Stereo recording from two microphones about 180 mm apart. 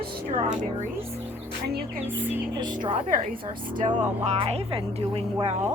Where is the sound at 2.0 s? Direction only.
10° right (ahead or behind).